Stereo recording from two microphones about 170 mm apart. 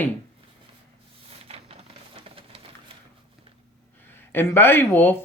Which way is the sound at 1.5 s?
35° right (ahead or behind).